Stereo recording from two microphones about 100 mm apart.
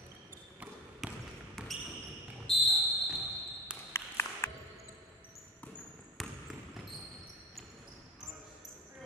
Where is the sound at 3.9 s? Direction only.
25° left (ahead or behind).